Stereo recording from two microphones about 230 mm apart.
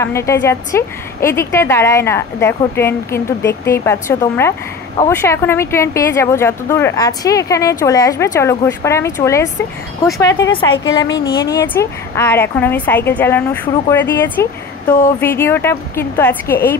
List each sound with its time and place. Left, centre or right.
0.0 s a woman's voice: centre